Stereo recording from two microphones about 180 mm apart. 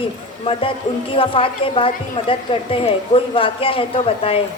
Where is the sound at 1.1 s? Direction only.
30° left (ahead or behind).